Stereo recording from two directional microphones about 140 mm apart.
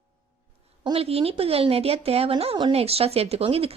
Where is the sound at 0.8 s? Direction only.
45° right (ahead or behind).